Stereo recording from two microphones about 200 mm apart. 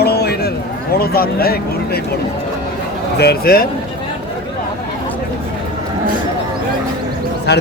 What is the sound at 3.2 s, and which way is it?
Speech, 50° left (ahead or behind).